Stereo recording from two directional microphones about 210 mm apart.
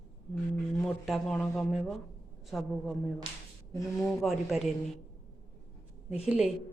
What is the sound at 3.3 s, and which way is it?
Speech, 25° right (ahead or behind).